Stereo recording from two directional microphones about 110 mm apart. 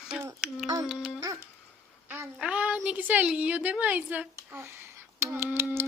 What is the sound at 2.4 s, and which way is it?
Child singing, 10° right (ahead or behind).